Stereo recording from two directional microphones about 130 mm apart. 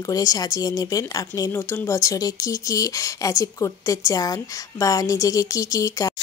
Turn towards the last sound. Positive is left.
turn(degrees=25)  # may be behind; listen again after turning